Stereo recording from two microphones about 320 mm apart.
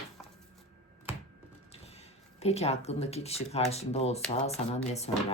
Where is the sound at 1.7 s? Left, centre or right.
Centre.